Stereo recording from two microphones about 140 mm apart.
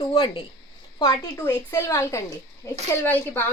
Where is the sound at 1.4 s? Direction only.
15° left (ahead or behind).